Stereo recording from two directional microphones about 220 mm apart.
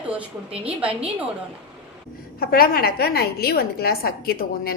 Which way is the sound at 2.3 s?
40° left (ahead or behind).